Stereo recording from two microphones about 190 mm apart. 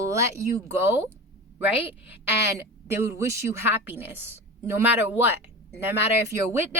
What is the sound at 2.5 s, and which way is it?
Speech, 15° right (ahead or behind).